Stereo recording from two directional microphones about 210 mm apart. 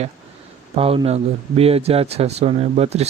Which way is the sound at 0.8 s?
30° right (ahead or behind).